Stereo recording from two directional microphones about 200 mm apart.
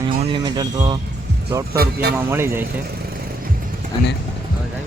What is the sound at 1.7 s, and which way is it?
Speech, 50° right (ahead or behind).